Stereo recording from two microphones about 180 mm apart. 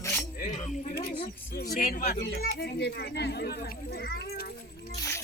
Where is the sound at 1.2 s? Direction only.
65° left (ahead or behind).